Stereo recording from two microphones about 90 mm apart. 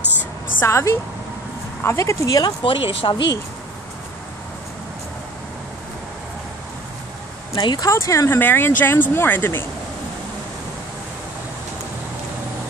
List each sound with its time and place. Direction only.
0.6 s speech: 30° left (ahead or behind)
2.6 s speech: 80° left
7.5 s speech: 50° left (ahead or behind)
7.9 s speech: 35° left (ahead or behind)